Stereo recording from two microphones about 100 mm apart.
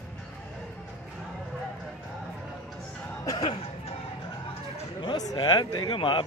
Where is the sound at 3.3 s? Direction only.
85° left.